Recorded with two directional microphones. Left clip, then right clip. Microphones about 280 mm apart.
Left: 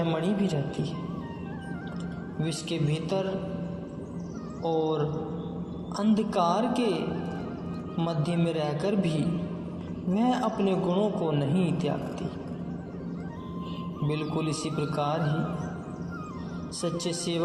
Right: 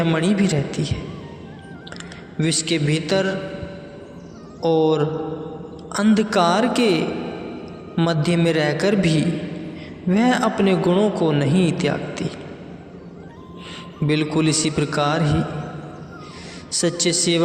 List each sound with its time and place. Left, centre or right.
0.0 s a man's voice: right
2.4 s a man's voice: right
4.6 s a man's voice: right
14.1 s a man's voice: right
16.7 s a man's voice: right